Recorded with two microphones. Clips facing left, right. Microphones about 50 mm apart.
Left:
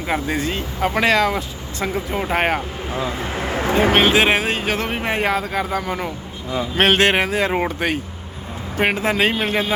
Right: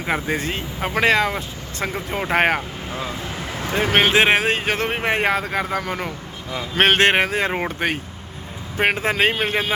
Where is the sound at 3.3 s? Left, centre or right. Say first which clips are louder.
Left 7 dB; left.